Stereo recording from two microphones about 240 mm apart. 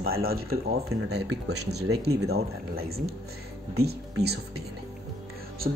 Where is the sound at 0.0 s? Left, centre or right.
Right.